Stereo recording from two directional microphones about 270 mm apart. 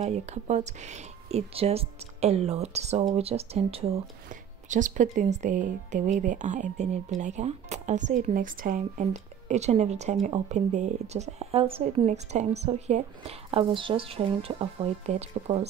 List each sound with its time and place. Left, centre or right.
0.0 s speech: right